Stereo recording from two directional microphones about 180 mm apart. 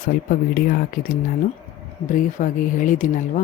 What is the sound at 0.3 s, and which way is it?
Speech, 50° left (ahead or behind).